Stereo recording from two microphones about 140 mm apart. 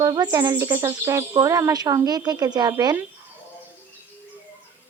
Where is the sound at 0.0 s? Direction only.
30° right (ahead or behind).